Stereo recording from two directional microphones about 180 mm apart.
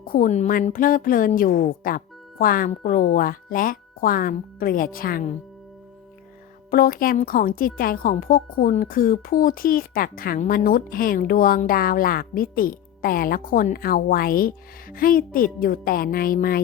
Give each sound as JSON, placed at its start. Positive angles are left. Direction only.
{"t": 0.1, "sound": "a woman's voice", "side_deg": 45}
{"t": 6.7, "sound": "a woman's voice", "side_deg": 55}